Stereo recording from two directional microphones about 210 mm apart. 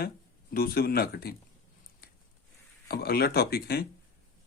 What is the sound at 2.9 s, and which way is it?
Speech, 45° left (ahead or behind).